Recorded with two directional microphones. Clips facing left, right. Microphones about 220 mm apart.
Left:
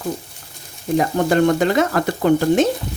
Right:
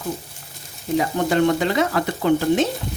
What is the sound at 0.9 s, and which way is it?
Speech, 50° left (ahead or behind).